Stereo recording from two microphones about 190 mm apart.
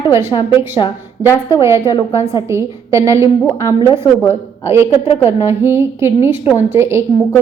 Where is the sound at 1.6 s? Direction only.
15° right (ahead or behind).